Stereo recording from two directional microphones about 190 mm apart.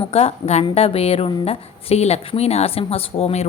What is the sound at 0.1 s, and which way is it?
A woman's voice, 30° left (ahead or behind).